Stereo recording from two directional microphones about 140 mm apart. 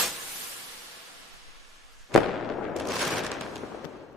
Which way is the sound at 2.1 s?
Centre (ahead or behind).